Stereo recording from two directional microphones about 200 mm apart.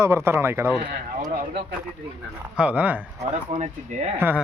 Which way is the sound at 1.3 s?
45° right (ahead or behind).